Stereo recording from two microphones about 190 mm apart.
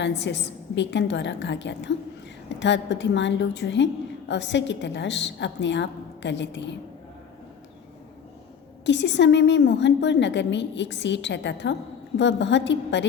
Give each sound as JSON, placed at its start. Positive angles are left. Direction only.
{"t": 0.0, "sound": "a woman's voice", "side_deg": 65}
{"t": 8.9, "sound": "a woman's voice", "side_deg": 70}